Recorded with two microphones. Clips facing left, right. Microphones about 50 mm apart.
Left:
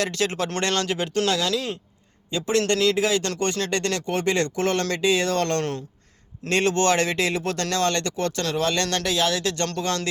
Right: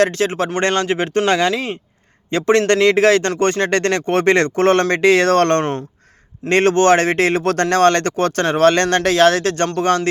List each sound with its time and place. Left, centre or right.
0.0 s speech: right
2.3 s speech: right
4.9 s speech: right